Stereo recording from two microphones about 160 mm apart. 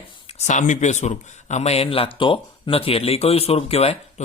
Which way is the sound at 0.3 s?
45° left (ahead or behind).